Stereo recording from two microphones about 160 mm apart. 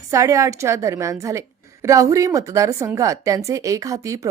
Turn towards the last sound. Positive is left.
turn(degrees=-20)  # may be behind; listen again after turning